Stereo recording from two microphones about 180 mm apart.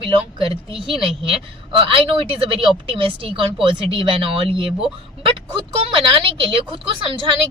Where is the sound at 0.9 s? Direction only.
5° right (ahead or behind).